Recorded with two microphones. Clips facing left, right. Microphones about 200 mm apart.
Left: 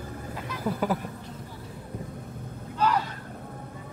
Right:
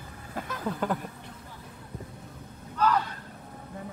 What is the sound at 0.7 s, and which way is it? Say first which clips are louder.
Speech: left 3 dB; 5° left (ahead or behind).